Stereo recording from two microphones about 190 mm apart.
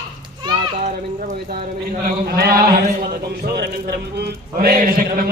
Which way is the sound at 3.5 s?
60° right (ahead or behind).